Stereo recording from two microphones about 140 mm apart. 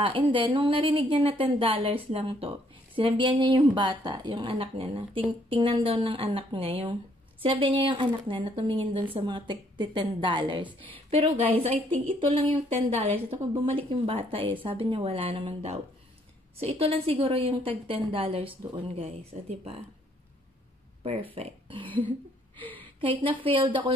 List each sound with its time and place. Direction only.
0.0 s a woman's voice: 40° right (ahead or behind)
21.0 s speech: 40° right (ahead or behind)
22.6 s a sound: 10° left (ahead or behind)
22.9 s a woman's voice: 40° right (ahead or behind)